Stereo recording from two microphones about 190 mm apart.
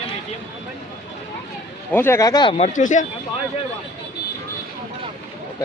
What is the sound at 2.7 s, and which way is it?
Speech, 40° left (ahead or behind).